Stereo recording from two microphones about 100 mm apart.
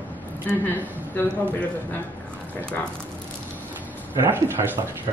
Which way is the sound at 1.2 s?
20° left (ahead or behind).